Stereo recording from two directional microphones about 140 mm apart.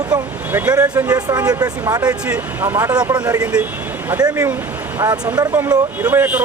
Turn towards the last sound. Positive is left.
turn(degrees=-10)  # may be behind; listen again after turning